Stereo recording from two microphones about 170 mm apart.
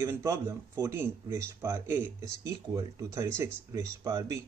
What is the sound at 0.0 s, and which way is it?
Speech, 20° right (ahead or behind).